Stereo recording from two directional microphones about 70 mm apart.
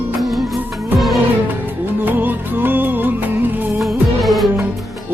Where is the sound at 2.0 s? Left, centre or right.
Right.